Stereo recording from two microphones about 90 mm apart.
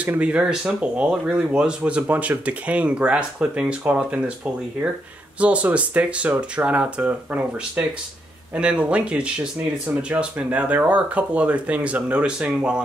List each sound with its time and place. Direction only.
0.0 s speech: 15° right (ahead or behind)
5.4 s speech: 15° right (ahead or behind)